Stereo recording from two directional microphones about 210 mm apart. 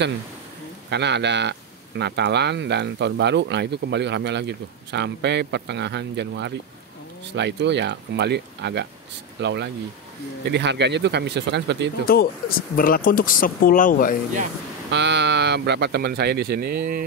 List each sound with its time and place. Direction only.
0.8 s speech: 55° right (ahead or behind)
12.1 s speech: 45° left (ahead or behind)
14.9 s speech: 55° right (ahead or behind)